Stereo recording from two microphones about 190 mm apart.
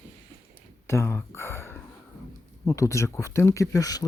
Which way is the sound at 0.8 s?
15° left (ahead or behind).